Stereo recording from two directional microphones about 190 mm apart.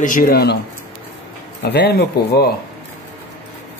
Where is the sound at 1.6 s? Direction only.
60° left (ahead or behind).